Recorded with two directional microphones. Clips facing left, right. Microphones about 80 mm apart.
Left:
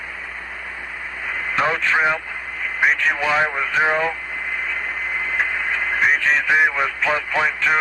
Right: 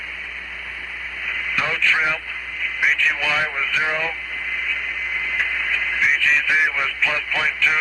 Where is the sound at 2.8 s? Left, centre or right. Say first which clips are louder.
Left 3 dB; left.